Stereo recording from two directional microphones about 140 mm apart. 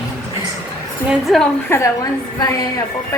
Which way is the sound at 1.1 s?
Centre (ahead or behind).